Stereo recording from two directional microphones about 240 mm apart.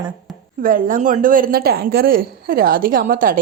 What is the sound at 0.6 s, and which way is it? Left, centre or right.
A woman's voice, right.